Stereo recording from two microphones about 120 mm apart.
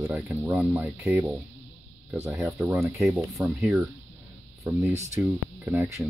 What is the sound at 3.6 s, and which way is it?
Speech, 5° right (ahead or behind).